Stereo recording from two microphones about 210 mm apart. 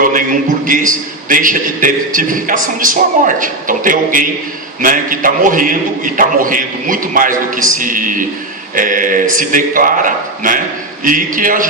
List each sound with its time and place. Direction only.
0.0 s a man's voice: 40° right (ahead or behind)